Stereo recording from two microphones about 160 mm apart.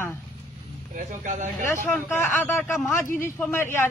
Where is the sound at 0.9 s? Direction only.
50° right (ahead or behind).